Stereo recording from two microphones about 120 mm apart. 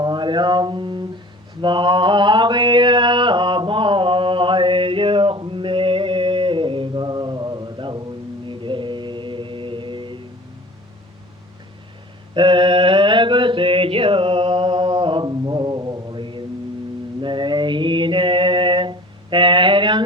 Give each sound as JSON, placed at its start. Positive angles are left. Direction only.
{"t": 0.0, "sound": "speech", "side_deg": -40}
{"t": 1.6, "sound": "mantra", "side_deg": -40}
{"t": 12.3, "sound": "a sound", "side_deg": -45}
{"t": 17.2, "sound": "mantra", "side_deg": -40}